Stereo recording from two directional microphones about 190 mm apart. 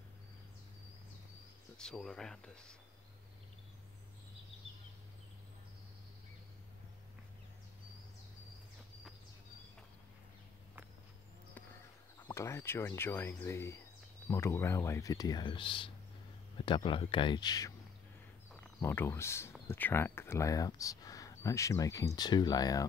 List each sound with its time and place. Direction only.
1.8 s speech: 5° left (ahead or behind)
12.3 s speech: 15° left (ahead or behind)